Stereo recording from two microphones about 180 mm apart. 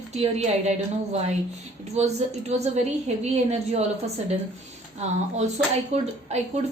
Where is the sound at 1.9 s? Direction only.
35° right (ahead or behind).